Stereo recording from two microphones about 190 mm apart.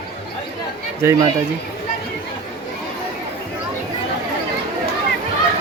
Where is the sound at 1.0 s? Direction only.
15° right (ahead or behind).